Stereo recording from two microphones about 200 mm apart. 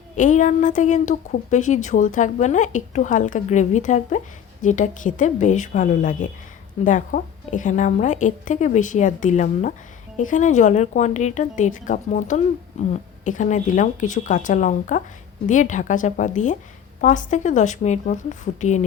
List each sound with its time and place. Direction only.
0.2 s a woman's voice: 40° left (ahead or behind)